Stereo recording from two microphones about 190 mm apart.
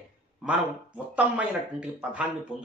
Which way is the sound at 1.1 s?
5° right (ahead or behind).